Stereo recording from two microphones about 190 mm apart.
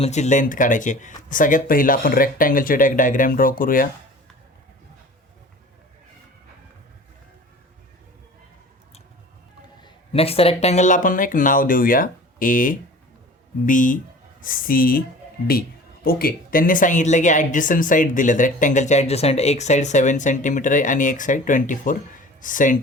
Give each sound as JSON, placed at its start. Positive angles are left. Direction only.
{"t": 0.0, "sound": "speech", "side_deg": 35}
{"t": 9.8, "sound": "speech", "side_deg": 30}
{"t": 16.0, "sound": "speech", "side_deg": 50}